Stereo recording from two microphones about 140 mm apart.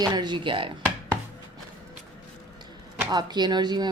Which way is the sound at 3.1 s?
30° right (ahead or behind).